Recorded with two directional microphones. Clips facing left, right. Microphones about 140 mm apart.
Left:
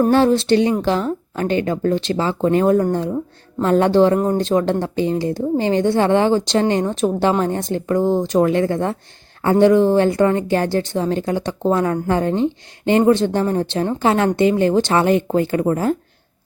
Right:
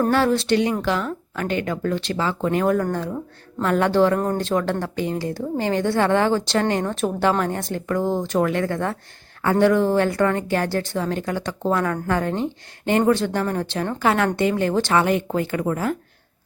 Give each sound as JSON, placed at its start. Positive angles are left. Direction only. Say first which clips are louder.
{"t": 0.1, "sound": "a woman's voice", "louder": "left 5 dB", "side_deg": 25}